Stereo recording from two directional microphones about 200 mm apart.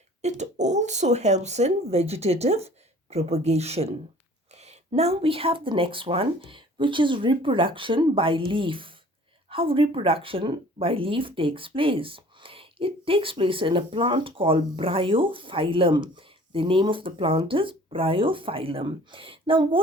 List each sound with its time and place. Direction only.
0.2 s speech: 35° right (ahead or behind)